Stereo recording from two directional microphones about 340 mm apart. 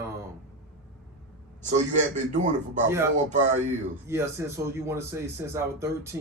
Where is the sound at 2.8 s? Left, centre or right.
Centre.